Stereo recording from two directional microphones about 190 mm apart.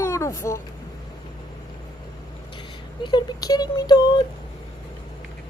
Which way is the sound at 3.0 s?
20° left (ahead or behind).